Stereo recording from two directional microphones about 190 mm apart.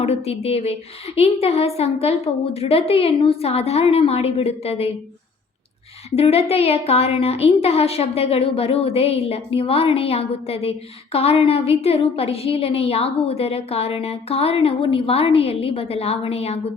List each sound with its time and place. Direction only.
0.0 s a woman's voice: 30° left (ahead or behind)
6.1 s a woman's voice: 30° left (ahead or behind)